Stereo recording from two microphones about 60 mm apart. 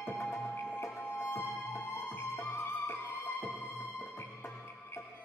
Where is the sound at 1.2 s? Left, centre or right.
Left.